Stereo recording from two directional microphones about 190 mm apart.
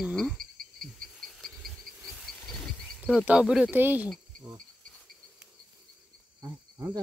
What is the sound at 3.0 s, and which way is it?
Speech, 5° right (ahead or behind).